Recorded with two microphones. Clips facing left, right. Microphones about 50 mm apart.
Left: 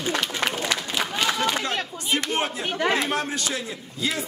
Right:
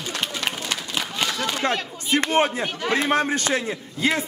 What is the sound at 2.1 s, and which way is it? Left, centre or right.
A man's voice, right.